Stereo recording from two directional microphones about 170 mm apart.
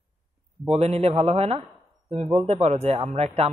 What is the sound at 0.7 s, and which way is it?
Speech, 40° right (ahead or behind).